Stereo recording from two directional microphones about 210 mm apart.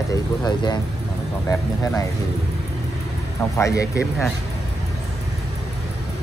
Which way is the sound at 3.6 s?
15° left (ahead or behind).